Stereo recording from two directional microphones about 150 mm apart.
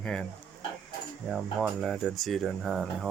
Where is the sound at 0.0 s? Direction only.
5° left (ahead or behind).